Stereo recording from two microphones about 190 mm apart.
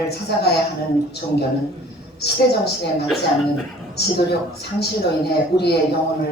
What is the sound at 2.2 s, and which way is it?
A woman's voice, 60° left (ahead or behind).